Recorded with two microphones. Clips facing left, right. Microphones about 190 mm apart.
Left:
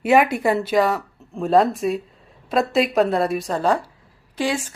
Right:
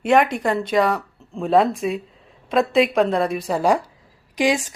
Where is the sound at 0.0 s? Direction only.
5° left (ahead or behind).